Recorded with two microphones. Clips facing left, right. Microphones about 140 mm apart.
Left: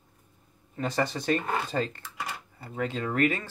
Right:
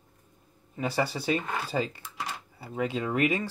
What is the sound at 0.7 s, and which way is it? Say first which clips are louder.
Speech: even; 10° right (ahead or behind).